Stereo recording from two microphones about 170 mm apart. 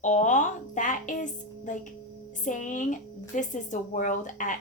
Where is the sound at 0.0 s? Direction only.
45° left (ahead or behind).